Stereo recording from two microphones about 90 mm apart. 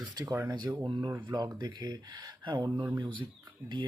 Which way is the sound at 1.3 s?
50° right (ahead or behind).